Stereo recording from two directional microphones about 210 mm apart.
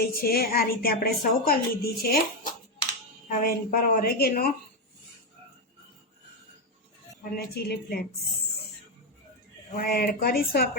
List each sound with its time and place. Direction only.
0.0 s a woman's voice: 45° left (ahead or behind)
7.3 s a woman's voice: 50° left (ahead or behind)
9.7 s a woman's voice: 45° left (ahead or behind)